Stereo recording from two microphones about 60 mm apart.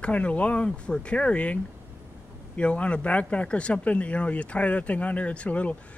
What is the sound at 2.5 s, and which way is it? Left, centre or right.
Speech, left.